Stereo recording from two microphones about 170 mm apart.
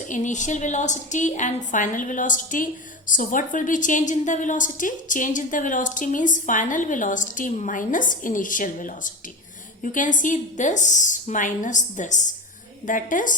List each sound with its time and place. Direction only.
0.1 s a woman's voice: 45° left (ahead or behind)